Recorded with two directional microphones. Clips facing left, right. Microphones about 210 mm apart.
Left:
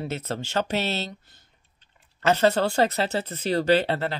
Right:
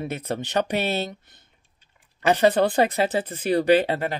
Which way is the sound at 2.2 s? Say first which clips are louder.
Right 2 dB; 15° right (ahead or behind).